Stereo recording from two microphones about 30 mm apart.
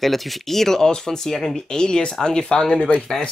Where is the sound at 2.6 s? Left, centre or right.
Centre.